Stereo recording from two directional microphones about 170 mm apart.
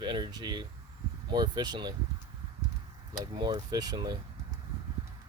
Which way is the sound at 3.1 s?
25° right (ahead or behind).